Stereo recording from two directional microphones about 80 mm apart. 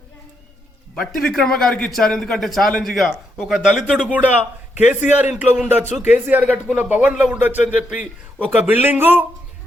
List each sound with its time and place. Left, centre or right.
0.9 s a man's voice: centre; by 9.2 s right